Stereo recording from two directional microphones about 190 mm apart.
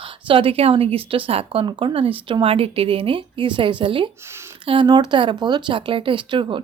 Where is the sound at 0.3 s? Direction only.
30° right (ahead or behind).